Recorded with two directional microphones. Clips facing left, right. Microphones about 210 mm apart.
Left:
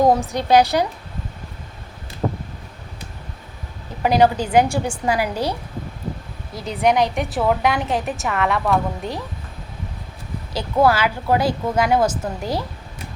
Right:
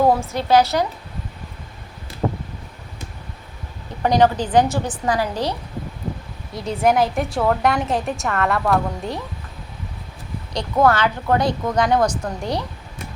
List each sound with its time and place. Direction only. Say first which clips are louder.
0.0 s a woman's voice: left 1 dB; 15° left (ahead or behind)
4.0 s a woman's voice: even; 10° left (ahead or behind)
10.5 s a woman's voice: even; 5° left (ahead or behind)